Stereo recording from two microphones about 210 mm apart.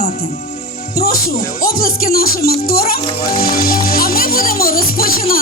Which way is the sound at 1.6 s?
45° left (ahead or behind).